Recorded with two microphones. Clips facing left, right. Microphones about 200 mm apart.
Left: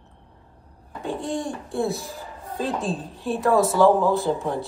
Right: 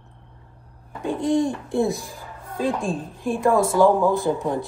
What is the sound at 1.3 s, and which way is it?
Speech, 20° right (ahead or behind).